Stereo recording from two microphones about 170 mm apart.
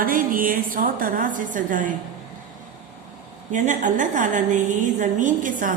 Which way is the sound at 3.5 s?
50° right (ahead or behind).